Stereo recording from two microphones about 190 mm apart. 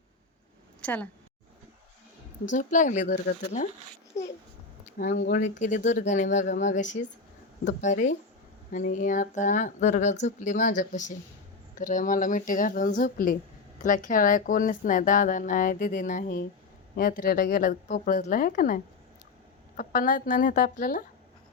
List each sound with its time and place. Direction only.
0.8 s a woman's voice: 5° left (ahead or behind)
2.5 s speech: 45° left (ahead or behind)
4.9 s speech: 50° left (ahead or behind)